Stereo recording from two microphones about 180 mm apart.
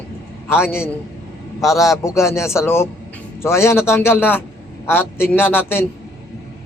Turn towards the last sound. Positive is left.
turn(degrees=10)  # may be behind; listen again after turning